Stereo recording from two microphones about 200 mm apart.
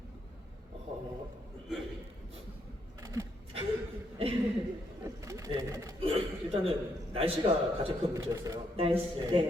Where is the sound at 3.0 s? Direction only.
15° right (ahead or behind).